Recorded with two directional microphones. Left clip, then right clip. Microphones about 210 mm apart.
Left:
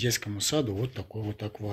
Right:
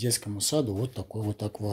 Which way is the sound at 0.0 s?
15° right (ahead or behind).